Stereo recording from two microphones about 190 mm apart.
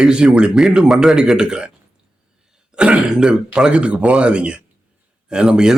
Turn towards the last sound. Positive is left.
turn(degrees=-5)  # may be behind; listen again after turning